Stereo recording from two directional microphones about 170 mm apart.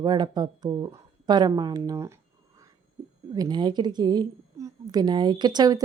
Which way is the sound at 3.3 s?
25° right (ahead or behind).